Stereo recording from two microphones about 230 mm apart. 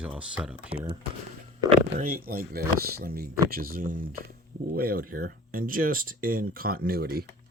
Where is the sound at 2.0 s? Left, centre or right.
Right.